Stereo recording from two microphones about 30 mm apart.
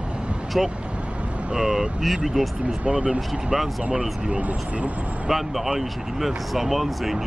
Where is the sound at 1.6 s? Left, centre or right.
Centre.